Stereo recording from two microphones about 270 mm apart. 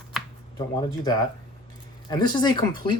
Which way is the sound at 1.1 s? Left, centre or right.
Centre.